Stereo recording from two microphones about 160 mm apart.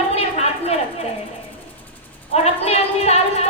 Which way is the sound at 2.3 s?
40° left (ahead or behind).